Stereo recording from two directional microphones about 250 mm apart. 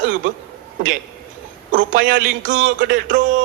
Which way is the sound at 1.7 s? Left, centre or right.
Right.